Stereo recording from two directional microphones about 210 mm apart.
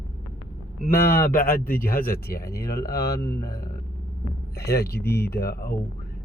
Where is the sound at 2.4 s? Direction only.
15° left (ahead or behind).